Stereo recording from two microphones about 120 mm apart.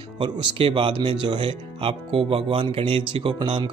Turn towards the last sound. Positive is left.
turn(degrees=-45)  # may be behind; listen again after turning